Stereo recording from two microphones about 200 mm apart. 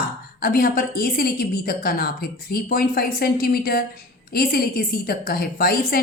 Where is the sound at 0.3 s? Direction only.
45° left (ahead or behind).